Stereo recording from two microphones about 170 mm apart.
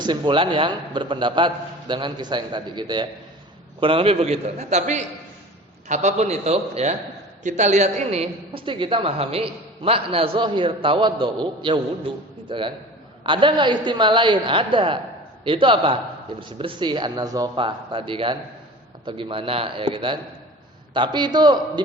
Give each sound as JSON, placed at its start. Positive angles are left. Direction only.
{"t": 0.0, "sound": "a man's voice", "side_deg": -25}